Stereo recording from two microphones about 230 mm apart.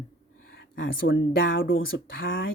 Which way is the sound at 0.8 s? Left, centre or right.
Left.